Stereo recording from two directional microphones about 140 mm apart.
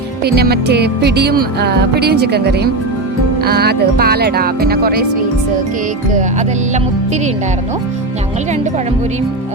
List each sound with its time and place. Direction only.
3.4 s speech: 90° right
6.1 s music: 60° right (ahead or behind)